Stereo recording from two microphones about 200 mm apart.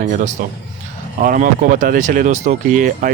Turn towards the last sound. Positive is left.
turn(degrees=-40)  # may be behind; listen again after turning